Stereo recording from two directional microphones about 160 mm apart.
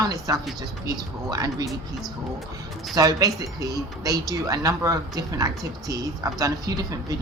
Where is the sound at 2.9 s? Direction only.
25° right (ahead or behind).